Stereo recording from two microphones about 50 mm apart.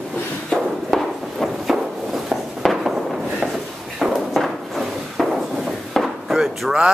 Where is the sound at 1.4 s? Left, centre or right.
Centre.